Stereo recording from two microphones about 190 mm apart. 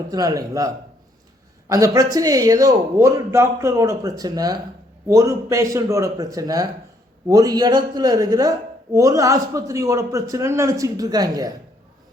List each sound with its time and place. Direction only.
0.1 s speech: 20° right (ahead or behind)
1.7 s speech: 15° right (ahead or behind)